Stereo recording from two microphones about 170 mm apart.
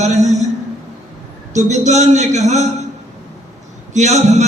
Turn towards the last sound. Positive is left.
turn(degrees=-40)  # may be behind; listen again after turning